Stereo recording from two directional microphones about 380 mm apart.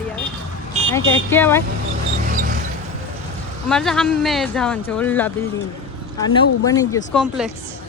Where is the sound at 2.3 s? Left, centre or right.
Right.